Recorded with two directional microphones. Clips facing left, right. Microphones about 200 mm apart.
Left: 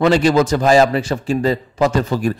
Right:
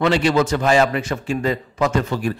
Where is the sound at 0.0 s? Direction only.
40° left (ahead or behind).